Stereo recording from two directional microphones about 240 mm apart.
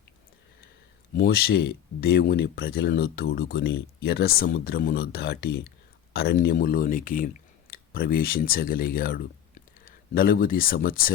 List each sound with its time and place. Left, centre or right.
1.1 s speech: left